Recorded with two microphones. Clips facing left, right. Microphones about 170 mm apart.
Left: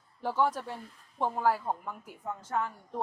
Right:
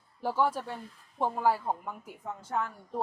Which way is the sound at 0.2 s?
10° right (ahead or behind).